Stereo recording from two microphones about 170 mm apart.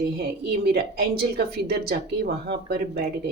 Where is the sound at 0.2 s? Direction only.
70° right (ahead or behind).